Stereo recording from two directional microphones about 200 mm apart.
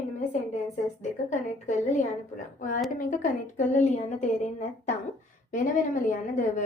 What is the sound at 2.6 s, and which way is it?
A woman's voice, 40° left (ahead or behind).